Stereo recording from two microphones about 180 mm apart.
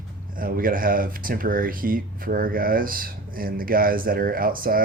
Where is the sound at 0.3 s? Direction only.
50° right (ahead or behind).